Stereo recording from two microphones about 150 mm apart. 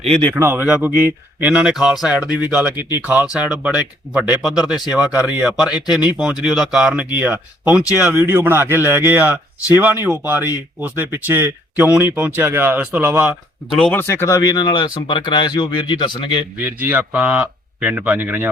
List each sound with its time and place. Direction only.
0.3 s speech: 15° right (ahead or behind)
13.7 s speech: 5° left (ahead or behind)
14.1 s speech: 20° left (ahead or behind)
16.6 s speech: 10° right (ahead or behind)